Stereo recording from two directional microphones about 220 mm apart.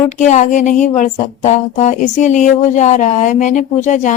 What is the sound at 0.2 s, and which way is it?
Speech, 35° left (ahead or behind).